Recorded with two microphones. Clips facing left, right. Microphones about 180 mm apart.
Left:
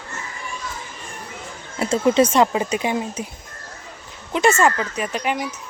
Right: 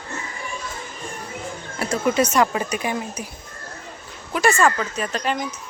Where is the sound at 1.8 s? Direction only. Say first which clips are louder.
Left 4 dB; 25° left (ahead or behind).